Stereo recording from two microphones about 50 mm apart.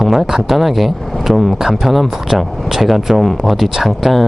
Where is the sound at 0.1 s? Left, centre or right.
Centre.